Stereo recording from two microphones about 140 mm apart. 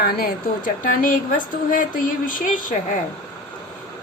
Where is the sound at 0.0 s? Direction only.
90° left; by 3.0 s 70° left (ahead or behind).